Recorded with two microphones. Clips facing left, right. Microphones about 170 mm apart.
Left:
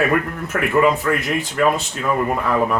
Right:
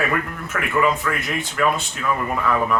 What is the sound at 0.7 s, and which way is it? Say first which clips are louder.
Speech: left 4 dB; 30° left (ahead or behind).